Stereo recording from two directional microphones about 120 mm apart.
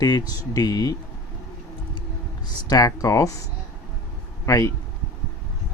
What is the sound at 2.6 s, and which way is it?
Speech, 30° left (ahead or behind).